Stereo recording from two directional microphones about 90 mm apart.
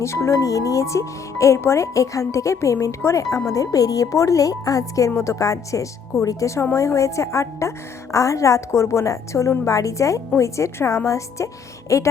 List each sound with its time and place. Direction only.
0.0 s speech: 30° left (ahead or behind)